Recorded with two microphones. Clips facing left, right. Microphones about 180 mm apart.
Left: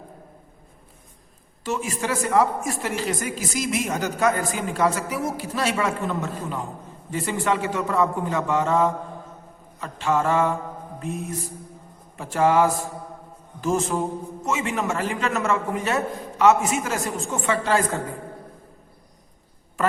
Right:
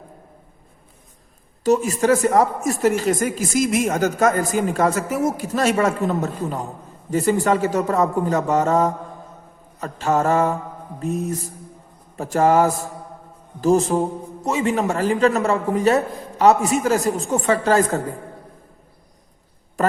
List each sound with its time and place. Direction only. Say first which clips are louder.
1.6 s a man's voice: right 10 dB; 40° right (ahead or behind)